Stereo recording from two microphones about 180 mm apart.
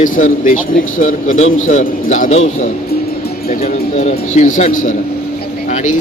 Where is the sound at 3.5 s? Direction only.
35° left (ahead or behind).